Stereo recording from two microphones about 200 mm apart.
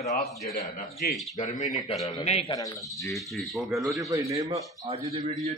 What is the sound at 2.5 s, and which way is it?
Speech, 15° left (ahead or behind).